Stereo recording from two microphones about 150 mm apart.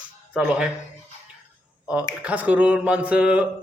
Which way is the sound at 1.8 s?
10° right (ahead or behind).